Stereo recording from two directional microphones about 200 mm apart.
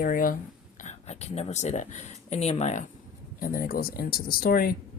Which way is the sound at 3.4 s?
45° left (ahead or behind).